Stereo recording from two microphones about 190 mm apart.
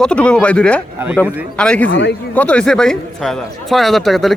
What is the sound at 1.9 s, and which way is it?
Speech, 65° left (ahead or behind).